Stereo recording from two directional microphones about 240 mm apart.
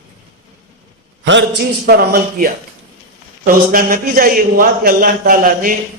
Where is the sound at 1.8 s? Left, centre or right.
Right.